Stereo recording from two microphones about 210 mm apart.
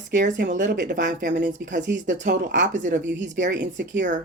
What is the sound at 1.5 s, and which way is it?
Speech, 35° right (ahead or behind).